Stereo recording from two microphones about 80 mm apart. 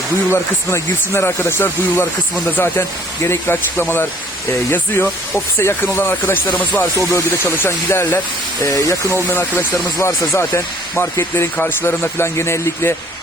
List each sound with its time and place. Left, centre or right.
0.3 s speech: left
3.2 s speech: left
6.9 s speech: left
7.3 s speech: left
8.6 s speech: left
9.3 s speech: left